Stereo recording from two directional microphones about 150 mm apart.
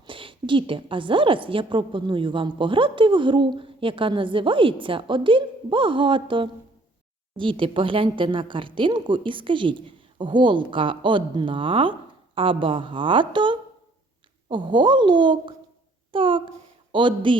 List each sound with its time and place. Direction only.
0.1 s a woman's voice: 35° right (ahead or behind)